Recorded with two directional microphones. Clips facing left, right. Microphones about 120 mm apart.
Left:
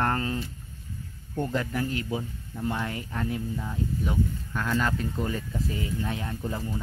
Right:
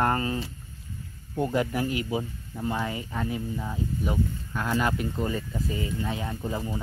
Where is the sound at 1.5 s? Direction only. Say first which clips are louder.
Right 3 dB; 15° right (ahead or behind).